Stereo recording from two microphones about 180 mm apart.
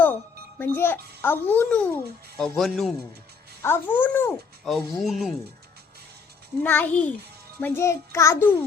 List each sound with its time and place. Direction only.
0.6 s speech: 10° left (ahead or behind)
3.6 s speech: 10° left (ahead or behind)
6.6 s speech: 10° left (ahead or behind)